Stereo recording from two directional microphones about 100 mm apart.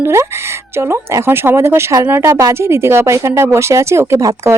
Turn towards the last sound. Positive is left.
turn(degrees=-30)  # may be behind; listen again after turning